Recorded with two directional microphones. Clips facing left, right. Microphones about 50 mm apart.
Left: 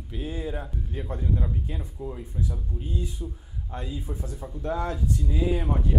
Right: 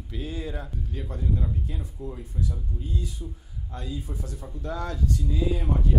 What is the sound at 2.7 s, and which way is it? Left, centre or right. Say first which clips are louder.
Speech: left 1 dB; left.